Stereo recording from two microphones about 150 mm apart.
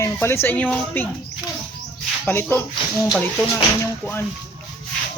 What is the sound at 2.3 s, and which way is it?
Speech, 15° left (ahead or behind).